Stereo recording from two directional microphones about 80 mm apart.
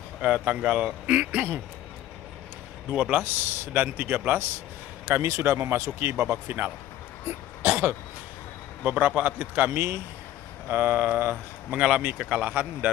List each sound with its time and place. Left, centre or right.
0.2 s speech: centre
2.9 s a man's voice: centre
7.6 s throat clearing: right
8.8 s a man's voice: centre
11.7 s speech: centre